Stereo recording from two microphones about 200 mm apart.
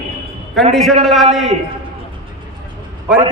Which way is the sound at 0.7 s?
Centre (ahead or behind).